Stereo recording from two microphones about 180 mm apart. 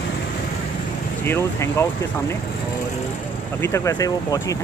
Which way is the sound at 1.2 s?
15° left (ahead or behind).